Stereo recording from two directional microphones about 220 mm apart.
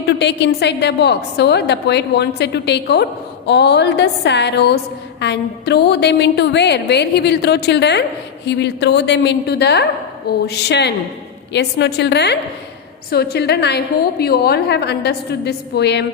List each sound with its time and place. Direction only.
0.2 s a woman's voice: 50° left (ahead or behind)